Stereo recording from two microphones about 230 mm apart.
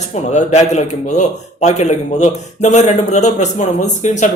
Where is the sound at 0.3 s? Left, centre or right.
Left.